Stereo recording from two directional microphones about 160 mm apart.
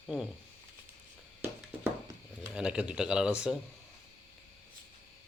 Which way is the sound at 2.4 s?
5° right (ahead or behind).